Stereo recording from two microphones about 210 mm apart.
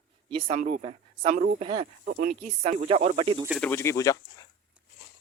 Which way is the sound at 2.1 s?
45° right (ahead or behind).